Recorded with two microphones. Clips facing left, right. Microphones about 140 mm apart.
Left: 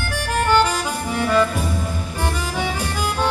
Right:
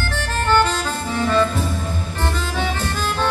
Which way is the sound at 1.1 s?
10° left (ahead or behind).